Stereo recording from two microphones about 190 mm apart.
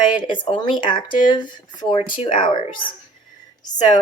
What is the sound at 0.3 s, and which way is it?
Speech, 25° left (ahead or behind).